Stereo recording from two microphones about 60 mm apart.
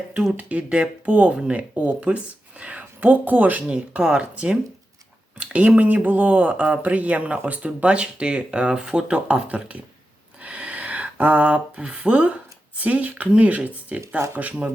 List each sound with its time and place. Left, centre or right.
0.3 s speech: right
3.8 s speech: centre